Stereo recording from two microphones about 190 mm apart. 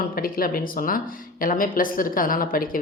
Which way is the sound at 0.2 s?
50° left (ahead or behind).